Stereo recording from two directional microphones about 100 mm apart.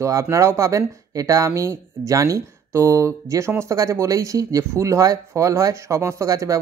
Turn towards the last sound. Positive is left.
turn(degrees=-35)  # may be behind; listen again after turning